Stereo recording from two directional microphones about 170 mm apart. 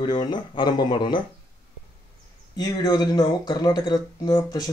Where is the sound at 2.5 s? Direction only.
25° left (ahead or behind).